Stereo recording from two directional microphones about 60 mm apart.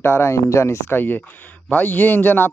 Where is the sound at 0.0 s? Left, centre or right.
Left.